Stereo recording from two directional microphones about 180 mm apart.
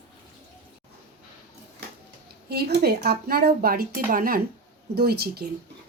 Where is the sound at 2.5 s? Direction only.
65° right (ahead or behind).